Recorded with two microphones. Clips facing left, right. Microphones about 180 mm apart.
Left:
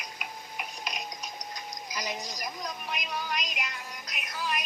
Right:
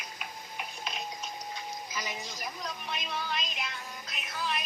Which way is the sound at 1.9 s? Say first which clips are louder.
Left 7 dB; 40° left (ahead or behind).